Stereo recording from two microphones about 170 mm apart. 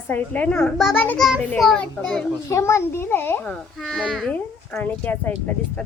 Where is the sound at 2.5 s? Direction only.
15° left (ahead or behind).